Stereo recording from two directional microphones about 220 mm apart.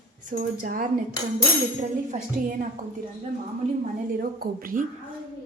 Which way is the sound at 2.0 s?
35° right (ahead or behind).